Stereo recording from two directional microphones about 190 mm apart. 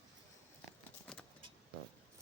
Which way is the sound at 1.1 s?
5° left (ahead or behind).